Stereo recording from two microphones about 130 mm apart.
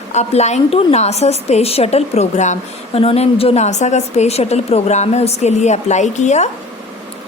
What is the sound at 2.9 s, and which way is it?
A woman's voice, 50° left (ahead or behind).